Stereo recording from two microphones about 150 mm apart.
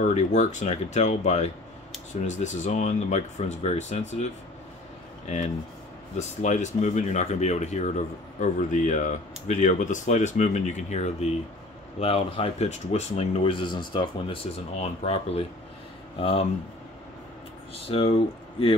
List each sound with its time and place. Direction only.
0.0 s speech: 50° left (ahead or behind)
6.1 s speech: 50° left (ahead or behind)
17.8 s speech: 40° left (ahead or behind)